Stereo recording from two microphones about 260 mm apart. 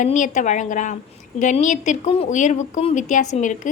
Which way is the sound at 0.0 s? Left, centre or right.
Left.